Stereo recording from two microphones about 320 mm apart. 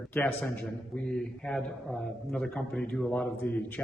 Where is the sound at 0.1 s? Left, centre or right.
Centre.